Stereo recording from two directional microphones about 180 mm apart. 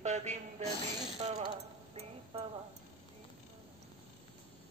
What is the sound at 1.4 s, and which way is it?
Music, 35° right (ahead or behind).